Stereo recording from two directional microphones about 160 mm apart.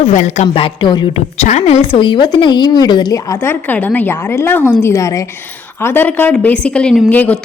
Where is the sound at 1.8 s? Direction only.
30° left (ahead or behind).